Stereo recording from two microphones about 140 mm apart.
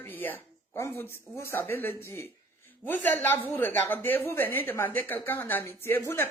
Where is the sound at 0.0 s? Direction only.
15° left (ahead or behind).